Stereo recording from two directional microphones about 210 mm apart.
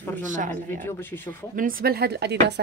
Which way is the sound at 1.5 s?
40° right (ahead or behind).